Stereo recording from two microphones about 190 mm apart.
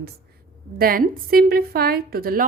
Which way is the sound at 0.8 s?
50° right (ahead or behind).